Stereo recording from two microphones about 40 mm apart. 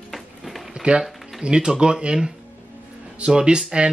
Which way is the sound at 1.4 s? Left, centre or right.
Right.